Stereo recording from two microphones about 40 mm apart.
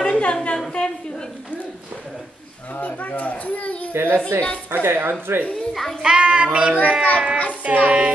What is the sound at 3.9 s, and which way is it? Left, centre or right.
Speech, right.